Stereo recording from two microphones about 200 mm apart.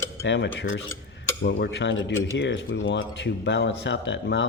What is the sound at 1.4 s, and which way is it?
Speech, 55° left (ahead or behind).